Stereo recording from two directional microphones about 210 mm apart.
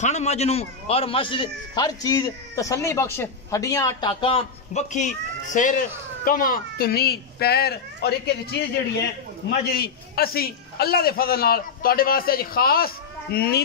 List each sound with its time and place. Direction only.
0.0 s a man's voice: 30° left (ahead or behind); by 8.6 s 50° left (ahead or behind)
9.8 s a man's voice: 45° left (ahead or behind)